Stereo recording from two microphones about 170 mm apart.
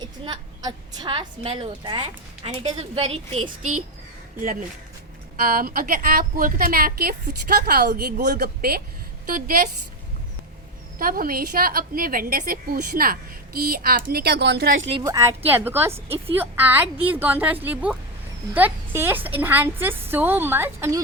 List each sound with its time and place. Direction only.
0.0 s a woman's voice: 25° right (ahead or behind); by 3.8 s 40° right (ahead or behind)
5.4 s a woman's voice: 55° right (ahead or behind)
10.9 s a woman's voice: 60° right (ahead or behind); by 14.8 s 80° right
15.0 s a woman's voice: 15° right (ahead or behind)